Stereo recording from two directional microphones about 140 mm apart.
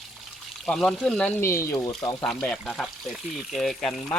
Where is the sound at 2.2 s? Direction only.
5° left (ahead or behind).